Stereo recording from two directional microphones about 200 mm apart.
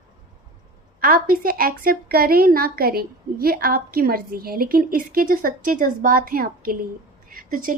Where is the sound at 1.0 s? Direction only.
45° right (ahead or behind).